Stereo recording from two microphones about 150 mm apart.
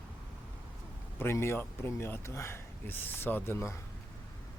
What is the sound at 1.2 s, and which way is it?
Speech, 15° left (ahead or behind).